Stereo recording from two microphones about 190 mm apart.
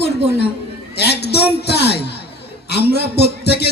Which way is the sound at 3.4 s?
60° left (ahead or behind).